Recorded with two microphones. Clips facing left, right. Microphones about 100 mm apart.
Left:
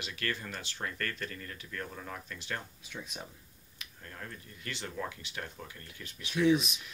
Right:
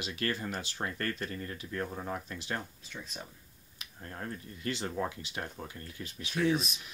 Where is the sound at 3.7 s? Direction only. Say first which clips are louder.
Right 4 dB; 30° right (ahead or behind).